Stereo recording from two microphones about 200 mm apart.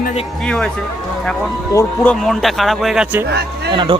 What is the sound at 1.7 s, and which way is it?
Speech, 15° left (ahead or behind).